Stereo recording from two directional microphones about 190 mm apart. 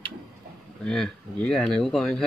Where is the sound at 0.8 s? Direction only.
5° left (ahead or behind).